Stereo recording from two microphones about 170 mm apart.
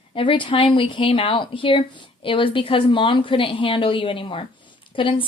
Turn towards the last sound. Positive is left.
turn(degrees=30)  # may be behind; listen again after turning